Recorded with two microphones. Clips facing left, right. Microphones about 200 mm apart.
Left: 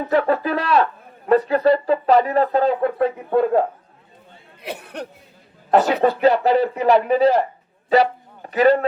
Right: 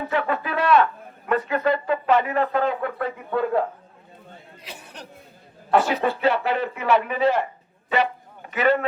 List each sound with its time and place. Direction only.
0.1 s speech: 35° left (ahead or behind)
4.6 s speech: 60° left (ahead or behind)
5.7 s speech: 40° left (ahead or behind)
7.9 s a sound: 35° left (ahead or behind)